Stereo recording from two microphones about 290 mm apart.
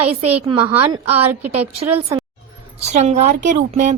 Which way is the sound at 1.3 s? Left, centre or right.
Right.